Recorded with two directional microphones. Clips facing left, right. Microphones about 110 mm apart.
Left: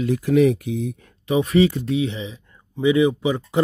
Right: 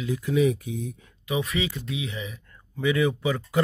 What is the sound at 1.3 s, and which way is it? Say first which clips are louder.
Speech: left 10 dB; 30° left (ahead or behind).